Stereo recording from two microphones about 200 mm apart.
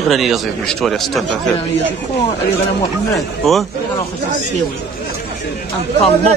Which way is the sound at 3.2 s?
Centre (ahead or behind).